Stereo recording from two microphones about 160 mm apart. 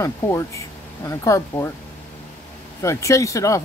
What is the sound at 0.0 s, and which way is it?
Speech, 20° left (ahead or behind).